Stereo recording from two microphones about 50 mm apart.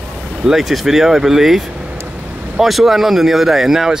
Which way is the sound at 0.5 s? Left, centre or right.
Centre.